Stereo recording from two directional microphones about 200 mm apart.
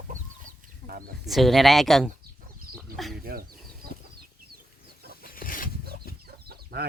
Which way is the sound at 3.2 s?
50° right (ahead or behind).